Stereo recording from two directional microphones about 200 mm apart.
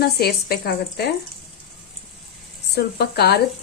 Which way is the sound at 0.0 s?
50° left (ahead or behind).